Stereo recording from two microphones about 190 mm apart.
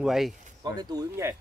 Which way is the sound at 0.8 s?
15° right (ahead or behind).